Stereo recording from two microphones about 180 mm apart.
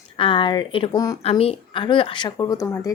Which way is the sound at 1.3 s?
35° left (ahead or behind).